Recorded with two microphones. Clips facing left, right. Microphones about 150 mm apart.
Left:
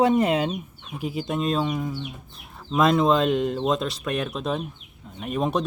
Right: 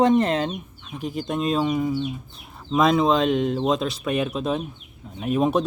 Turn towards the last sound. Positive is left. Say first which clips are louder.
# right 4 dB
turn(degrees=0)  # may be behind; listen again after turning